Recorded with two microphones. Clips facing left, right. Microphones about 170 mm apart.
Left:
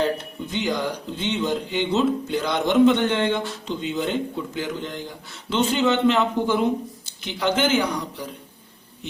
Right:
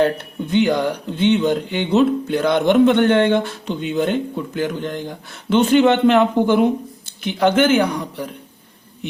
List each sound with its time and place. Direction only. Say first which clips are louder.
0.0 s speech: right 6 dB; 60° right (ahead or behind)